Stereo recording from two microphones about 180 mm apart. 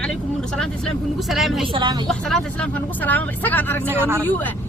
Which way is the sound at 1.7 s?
25° right (ahead or behind).